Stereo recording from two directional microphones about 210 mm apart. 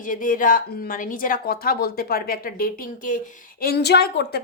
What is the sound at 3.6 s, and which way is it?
Speech, 50° left (ahead or behind).